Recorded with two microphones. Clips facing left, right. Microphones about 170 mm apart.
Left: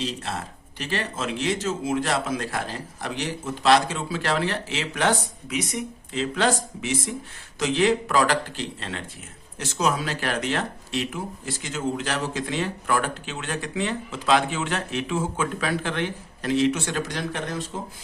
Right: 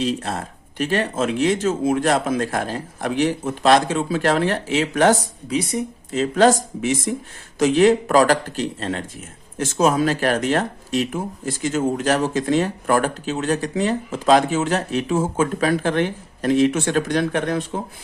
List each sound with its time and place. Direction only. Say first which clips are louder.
0.0 s speech: right 7 dB; 50° right (ahead or behind); by 6.1 s 30° right (ahead or behind)
6.1 s speech: right 8 dB; 45° right (ahead or behind)